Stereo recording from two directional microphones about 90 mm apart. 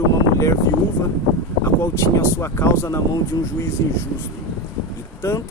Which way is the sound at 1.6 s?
30° left (ahead or behind).